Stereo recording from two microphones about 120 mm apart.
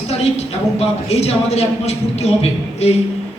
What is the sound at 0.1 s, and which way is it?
Speech, 60° left (ahead or behind).